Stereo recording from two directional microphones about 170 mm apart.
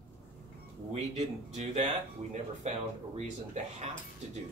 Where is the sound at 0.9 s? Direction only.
40° right (ahead or behind).